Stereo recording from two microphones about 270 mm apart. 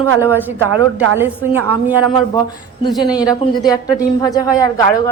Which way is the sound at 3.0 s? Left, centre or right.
Centre.